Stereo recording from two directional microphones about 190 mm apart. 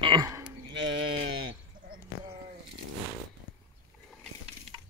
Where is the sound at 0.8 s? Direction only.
75° right (ahead or behind).